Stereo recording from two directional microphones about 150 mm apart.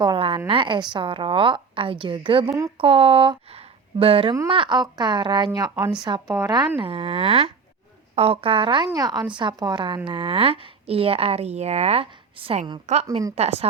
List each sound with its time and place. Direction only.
0.0 s a woman's voice: 35° right (ahead or behind)
6.7 s a woman's voice: 40° right (ahead or behind)